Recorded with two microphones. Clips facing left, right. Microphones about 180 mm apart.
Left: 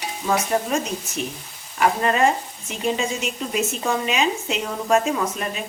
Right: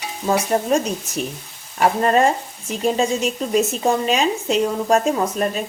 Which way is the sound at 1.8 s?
40° right (ahead or behind).